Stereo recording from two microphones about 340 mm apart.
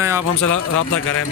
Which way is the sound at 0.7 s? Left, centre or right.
Left.